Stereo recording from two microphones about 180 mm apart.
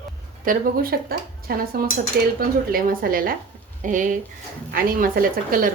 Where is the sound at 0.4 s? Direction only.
55° right (ahead or behind).